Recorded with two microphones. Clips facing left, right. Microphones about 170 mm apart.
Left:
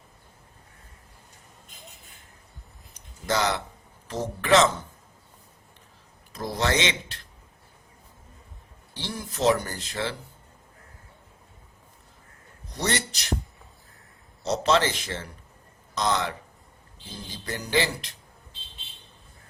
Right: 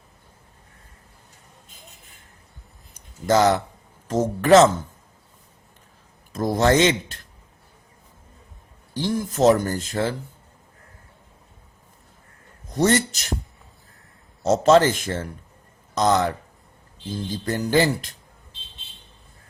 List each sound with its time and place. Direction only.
2.9 s a sound: 45° right (ahead or behind)
4.1 s speech: 45° right (ahead or behind)
6.3 s speech: 50° right (ahead or behind)
8.9 s speech: 45° right (ahead or behind)
12.7 s speech: 45° right (ahead or behind)
14.4 s speech: 45° right (ahead or behind)
17.4 s speech: 50° right (ahead or behind)